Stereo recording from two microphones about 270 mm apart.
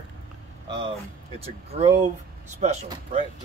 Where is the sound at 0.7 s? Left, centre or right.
Centre.